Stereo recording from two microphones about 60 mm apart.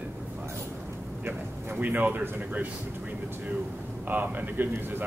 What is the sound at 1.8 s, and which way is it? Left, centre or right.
Speech, right.